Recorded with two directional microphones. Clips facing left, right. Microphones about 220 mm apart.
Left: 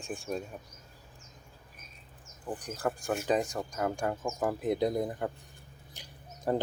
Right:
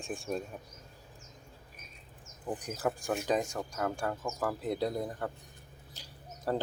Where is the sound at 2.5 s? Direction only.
10° right (ahead or behind); by 5.3 s 20° left (ahead or behind).